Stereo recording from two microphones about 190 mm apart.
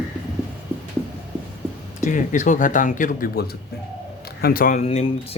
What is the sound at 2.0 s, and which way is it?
Speech, 40° left (ahead or behind).